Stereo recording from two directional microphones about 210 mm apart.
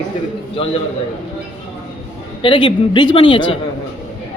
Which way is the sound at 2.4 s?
25° left (ahead or behind).